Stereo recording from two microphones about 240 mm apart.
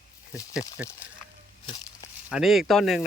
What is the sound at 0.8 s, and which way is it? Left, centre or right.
Speech, centre.